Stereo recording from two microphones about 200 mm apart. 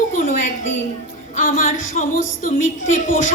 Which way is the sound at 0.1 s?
40° left (ahead or behind).